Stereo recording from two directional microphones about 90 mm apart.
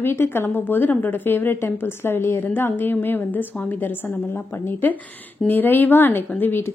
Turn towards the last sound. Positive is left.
turn(degrees=25)  # may be behind; listen again after turning